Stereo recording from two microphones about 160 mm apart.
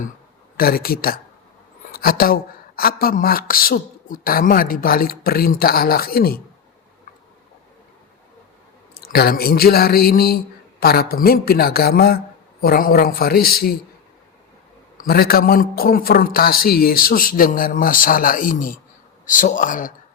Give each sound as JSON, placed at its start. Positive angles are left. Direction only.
{"t": 0.5, "sound": "a woman's voice", "side_deg": 70}
{"t": 9.0, "sound": "a woman's voice", "side_deg": 70}
{"t": 14.9, "sound": "a man's voice", "side_deg": 70}